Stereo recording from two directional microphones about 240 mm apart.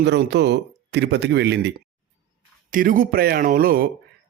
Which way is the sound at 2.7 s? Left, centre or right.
Right.